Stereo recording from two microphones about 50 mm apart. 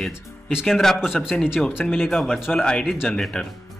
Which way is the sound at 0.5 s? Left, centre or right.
Centre.